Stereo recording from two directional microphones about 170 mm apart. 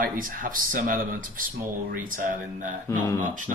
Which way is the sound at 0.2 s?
55° right (ahead or behind).